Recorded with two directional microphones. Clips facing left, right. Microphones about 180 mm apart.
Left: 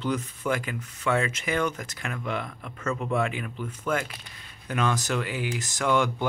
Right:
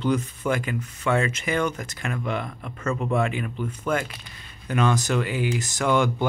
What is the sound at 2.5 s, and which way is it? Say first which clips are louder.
Mechanisms: right 3 dB; 10° right (ahead or behind).